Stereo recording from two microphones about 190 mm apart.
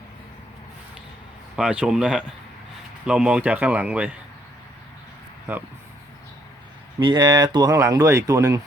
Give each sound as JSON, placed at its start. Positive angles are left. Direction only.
{"t": 1.5, "sound": "a man's voice", "side_deg": -5}
{"t": 7.0, "sound": "speech", "side_deg": -25}